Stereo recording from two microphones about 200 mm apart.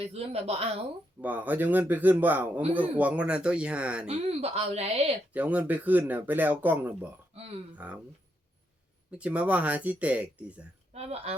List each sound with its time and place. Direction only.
0.0 s speech: 30° right (ahead or behind)
1.2 s a man's voice: 10° right (ahead or behind)
4.0 s speech: 30° right (ahead or behind)
5.3 s a man's voice: 10° right (ahead or behind)
9.1 s a man's voice: 5° right (ahead or behind)
10.9 s speech: 30° right (ahead or behind)